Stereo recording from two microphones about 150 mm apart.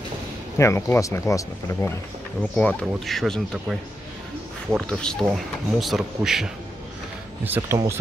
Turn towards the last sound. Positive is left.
turn(degrees=-20)  # may be behind; listen again after turning